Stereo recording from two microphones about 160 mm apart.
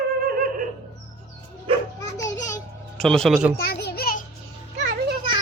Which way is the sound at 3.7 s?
80° left.